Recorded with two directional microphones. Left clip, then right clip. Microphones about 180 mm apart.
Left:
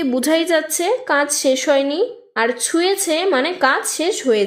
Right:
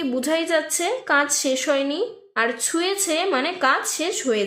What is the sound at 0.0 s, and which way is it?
A woman's voice, 45° left (ahead or behind).